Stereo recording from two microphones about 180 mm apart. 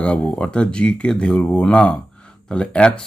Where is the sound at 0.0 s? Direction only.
5° left (ahead or behind).